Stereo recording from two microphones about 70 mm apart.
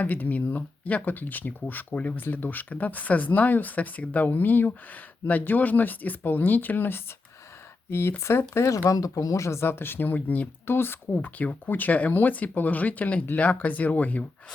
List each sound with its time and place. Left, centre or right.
0.0 s speech: left
8.7 s speech: left